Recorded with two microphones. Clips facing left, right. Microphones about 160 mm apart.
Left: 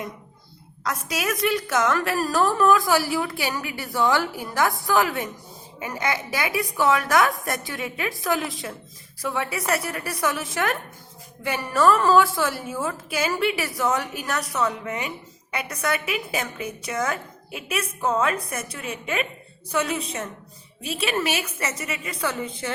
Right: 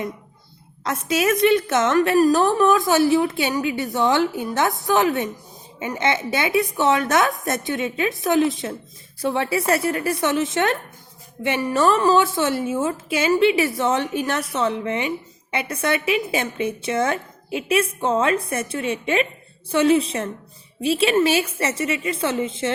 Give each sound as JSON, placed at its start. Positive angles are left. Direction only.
{"t": 0.9, "sound": "a woman's voice", "side_deg": -25}